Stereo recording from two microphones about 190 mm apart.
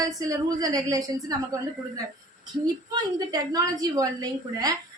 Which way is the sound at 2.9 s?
20° right (ahead or behind).